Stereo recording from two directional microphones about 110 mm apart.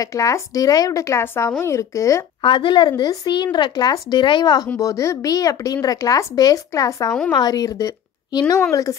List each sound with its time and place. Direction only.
0.0 s a woman's voice: 30° left (ahead or behind)
2.4 s speech: 50° left (ahead or behind)
4.7 s a woman's voice: 30° left (ahead or behind)